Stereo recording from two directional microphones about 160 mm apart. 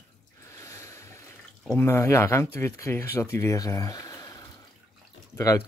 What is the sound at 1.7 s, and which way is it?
Speech, 15° left (ahead or behind).